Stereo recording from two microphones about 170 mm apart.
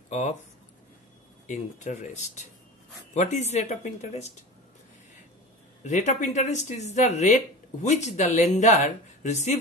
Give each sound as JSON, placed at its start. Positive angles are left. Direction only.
{"t": 0.1, "sound": "speech", "side_deg": 45}
{"t": 1.5, "sound": "speech", "side_deg": 45}
{"t": 5.9, "sound": "speech", "side_deg": 45}